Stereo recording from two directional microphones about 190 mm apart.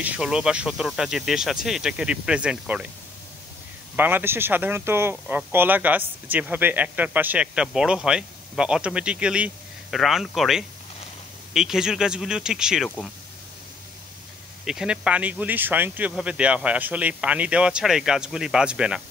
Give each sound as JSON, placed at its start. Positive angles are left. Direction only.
{"t": 0.0, "sound": "speech", "side_deg": -5}
{"t": 3.9, "sound": "speech", "side_deg": -10}
{"t": 14.6, "sound": "speech", "side_deg": -5}